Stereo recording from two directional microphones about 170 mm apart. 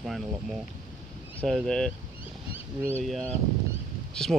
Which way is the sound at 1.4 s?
5° left (ahead or behind).